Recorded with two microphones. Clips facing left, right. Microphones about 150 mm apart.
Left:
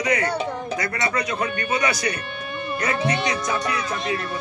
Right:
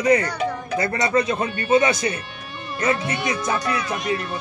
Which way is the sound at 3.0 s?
20° left (ahead or behind).